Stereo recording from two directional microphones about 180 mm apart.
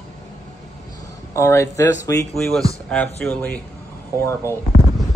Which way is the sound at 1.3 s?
15° left (ahead or behind).